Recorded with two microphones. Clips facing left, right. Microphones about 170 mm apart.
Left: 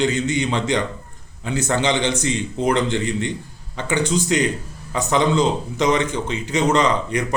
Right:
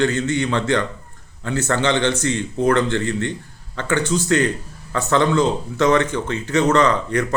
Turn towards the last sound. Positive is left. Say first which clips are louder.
# right 2 dB
turn(degrees=15)  # may be behind; listen again after turning